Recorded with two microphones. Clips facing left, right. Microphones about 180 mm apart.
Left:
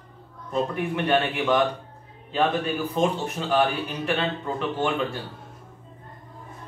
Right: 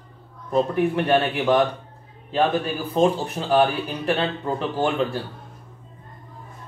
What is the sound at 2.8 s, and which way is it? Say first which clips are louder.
Speech: right 8 dB; 35° right (ahead or behind).